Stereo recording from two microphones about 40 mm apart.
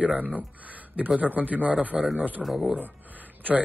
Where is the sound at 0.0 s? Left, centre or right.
Right.